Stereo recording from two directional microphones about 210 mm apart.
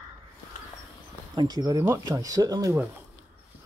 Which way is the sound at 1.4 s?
20° right (ahead or behind).